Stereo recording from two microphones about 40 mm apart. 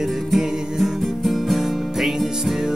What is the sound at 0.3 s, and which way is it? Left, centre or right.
Music, centre.